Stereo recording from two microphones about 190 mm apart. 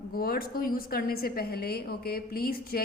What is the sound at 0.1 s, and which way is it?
A woman's voice, 50° left (ahead or behind).